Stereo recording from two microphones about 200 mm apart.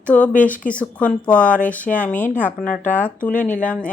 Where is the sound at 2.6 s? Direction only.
40° left (ahead or behind).